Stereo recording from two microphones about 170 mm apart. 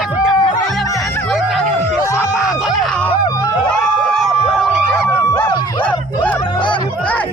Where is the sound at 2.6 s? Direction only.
Centre (ahead or behind).